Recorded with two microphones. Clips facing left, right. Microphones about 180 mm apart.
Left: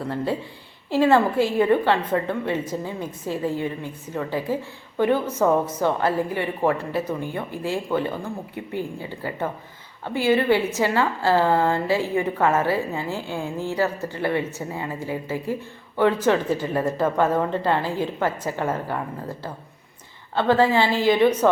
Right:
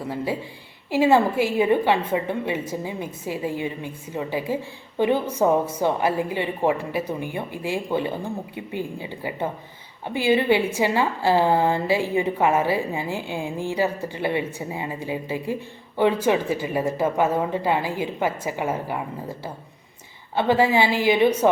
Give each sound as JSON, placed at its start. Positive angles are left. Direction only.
{"t": 0.0, "sound": "a woman's voice", "side_deg": -10}